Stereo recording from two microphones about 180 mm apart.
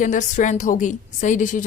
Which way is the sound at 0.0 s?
45° left (ahead or behind).